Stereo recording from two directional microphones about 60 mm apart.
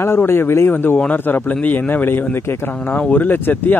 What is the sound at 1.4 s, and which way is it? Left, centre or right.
Speech, left.